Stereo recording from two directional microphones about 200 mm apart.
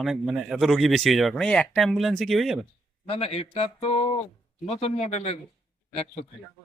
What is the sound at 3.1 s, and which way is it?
A man's voice, 30° left (ahead or behind).